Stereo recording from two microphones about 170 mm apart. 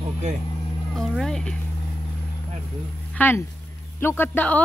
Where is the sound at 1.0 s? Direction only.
5° left (ahead or behind).